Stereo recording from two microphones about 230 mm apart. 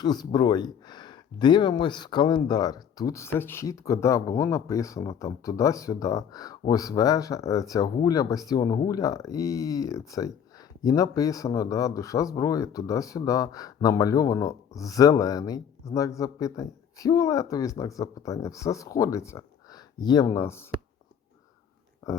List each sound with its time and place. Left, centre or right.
0.0 s speech: centre
22.0 s speech: centre